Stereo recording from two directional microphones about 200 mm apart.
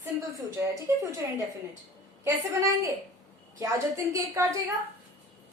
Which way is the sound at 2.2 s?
15° right (ahead or behind).